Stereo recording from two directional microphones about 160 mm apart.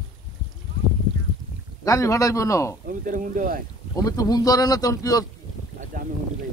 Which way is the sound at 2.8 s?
55° right (ahead or behind).